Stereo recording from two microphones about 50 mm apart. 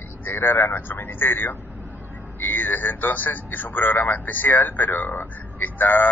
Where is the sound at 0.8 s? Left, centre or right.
Left.